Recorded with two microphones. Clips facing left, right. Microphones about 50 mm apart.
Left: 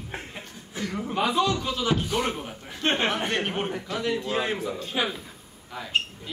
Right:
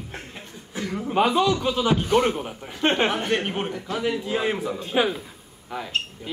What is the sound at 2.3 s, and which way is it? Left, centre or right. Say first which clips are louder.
Chuckle: right 4 dB; right.